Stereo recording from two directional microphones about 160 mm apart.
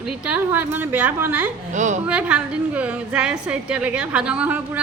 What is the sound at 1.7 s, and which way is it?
Speech, 50° right (ahead or behind).